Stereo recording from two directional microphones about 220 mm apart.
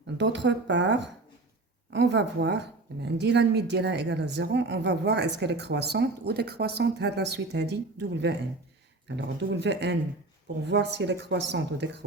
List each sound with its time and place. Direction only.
0.2 s a woman's voice: 55° right (ahead or behind)